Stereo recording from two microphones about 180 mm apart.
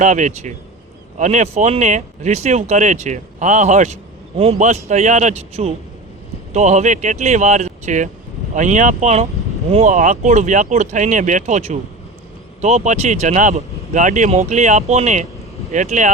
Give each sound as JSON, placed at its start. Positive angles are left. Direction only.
{"t": 0.0, "sound": "speech", "side_deg": -40}